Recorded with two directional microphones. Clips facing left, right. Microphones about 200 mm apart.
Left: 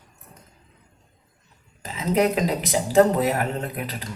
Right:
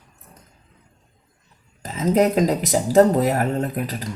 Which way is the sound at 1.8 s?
40° right (ahead or behind).